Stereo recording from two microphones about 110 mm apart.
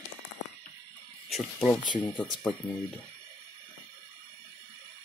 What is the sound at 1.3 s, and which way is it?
Speech, centre (ahead or behind).